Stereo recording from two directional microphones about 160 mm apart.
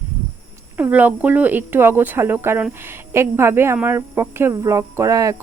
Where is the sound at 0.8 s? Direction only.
10° right (ahead or behind).